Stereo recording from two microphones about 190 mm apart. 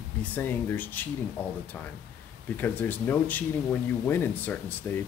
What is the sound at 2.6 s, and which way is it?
Speech, 10° left (ahead or behind).